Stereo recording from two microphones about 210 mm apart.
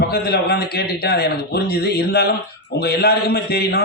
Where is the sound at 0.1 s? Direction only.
50° left (ahead or behind).